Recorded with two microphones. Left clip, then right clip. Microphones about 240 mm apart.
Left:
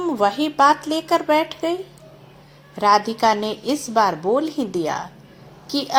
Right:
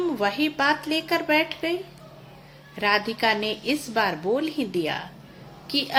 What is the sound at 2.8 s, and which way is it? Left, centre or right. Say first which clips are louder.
A woman's voice: left 6 dB; left.